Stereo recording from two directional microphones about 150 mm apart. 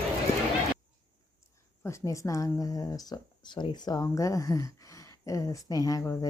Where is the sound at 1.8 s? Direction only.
20° left (ahead or behind).